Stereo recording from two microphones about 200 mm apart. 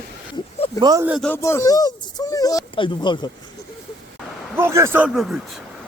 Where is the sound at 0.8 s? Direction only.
20° right (ahead or behind).